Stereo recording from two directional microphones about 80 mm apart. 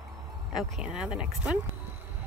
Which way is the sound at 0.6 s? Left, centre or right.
Centre.